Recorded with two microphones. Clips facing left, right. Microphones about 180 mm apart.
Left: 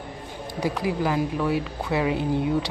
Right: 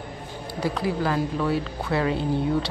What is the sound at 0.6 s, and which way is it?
A woman's voice, 15° left (ahead or behind).